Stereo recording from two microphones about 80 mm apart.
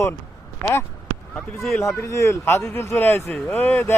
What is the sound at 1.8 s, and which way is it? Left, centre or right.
A man's voice, left.